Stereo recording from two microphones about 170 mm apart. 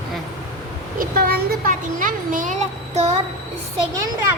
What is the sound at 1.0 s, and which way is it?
A child's voice, 60° right (ahead or behind).